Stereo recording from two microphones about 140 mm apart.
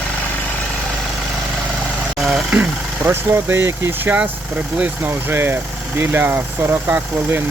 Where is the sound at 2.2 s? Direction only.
Centre (ahead or behind).